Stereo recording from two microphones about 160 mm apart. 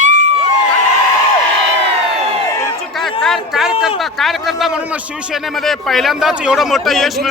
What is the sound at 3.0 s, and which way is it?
A man's voice, centre (ahead or behind).